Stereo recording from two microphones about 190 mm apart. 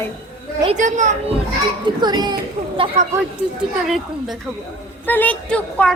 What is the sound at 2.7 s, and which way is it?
Speech, 35° right (ahead or behind).